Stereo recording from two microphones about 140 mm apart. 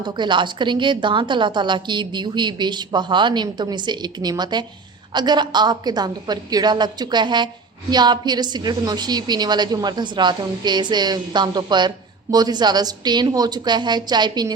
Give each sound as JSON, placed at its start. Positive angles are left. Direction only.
{"t": 0.0, "sound": "a woman's voice", "side_deg": -35}